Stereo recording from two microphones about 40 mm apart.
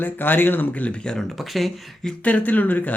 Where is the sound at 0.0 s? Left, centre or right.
Left.